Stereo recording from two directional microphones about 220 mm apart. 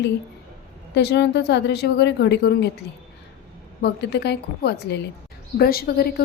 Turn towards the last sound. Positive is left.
turn(degrees=45)  # may be behind; listen again after turning